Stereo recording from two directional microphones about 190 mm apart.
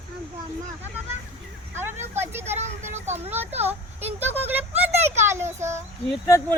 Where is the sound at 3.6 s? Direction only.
10° right (ahead or behind).